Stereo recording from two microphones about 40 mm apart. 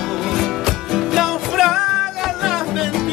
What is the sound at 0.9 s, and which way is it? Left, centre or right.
Music, centre.